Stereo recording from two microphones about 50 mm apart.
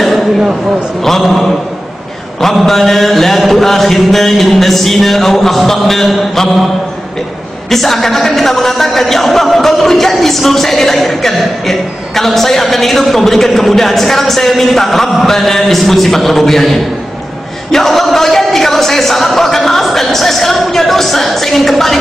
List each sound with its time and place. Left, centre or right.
0.0 s a sound: centre
1.0 s speech: centre
7.7 s speech: centre